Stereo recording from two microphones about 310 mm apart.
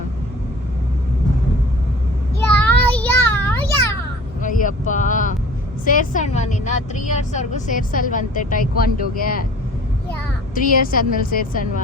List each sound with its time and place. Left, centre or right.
2.5 s children playing: centre
4.4 s vehicle: left
5.8 s a woman's voice: left
10.5 s a woman's voice: left